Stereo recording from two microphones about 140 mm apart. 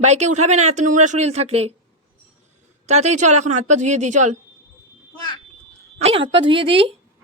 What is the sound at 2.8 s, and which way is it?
Speech, 55° right (ahead or behind).